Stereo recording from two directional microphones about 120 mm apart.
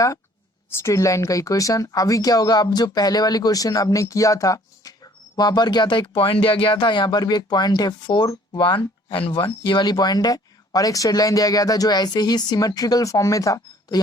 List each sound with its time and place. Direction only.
0.7 s speech: 25° left (ahead or behind)